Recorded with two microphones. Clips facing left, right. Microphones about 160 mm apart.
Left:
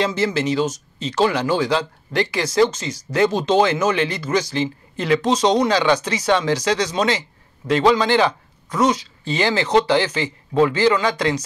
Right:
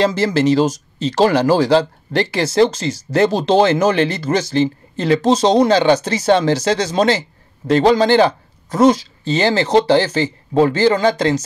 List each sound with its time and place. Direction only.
0.0 s speech: 35° right (ahead or behind)
8.7 s speech: 50° right (ahead or behind)
9.2 s speech: 35° right (ahead or behind)